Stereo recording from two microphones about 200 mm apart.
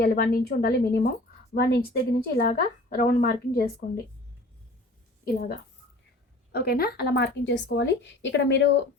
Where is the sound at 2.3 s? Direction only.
50° left (ahead or behind).